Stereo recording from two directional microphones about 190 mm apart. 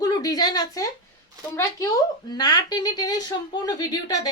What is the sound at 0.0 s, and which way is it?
Speech, 20° left (ahead or behind).